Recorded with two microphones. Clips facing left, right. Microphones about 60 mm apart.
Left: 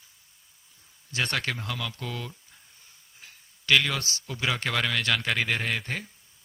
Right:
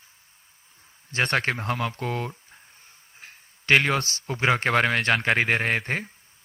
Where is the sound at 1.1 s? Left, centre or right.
Right.